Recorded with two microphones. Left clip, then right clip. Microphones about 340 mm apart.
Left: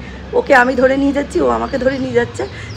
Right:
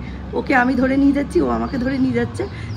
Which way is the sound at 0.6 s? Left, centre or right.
Left.